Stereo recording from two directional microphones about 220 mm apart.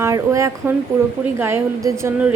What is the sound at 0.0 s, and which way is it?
A woman's voice, 15° right (ahead or behind).